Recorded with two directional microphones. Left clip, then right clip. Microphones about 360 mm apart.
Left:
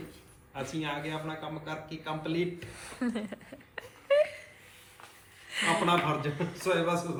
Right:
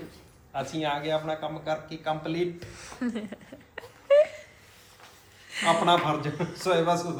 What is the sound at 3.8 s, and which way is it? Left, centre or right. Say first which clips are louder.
Whimper: right 5 dB; centre.